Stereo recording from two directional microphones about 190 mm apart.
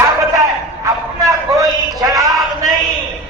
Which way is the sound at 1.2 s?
15° right (ahead or behind).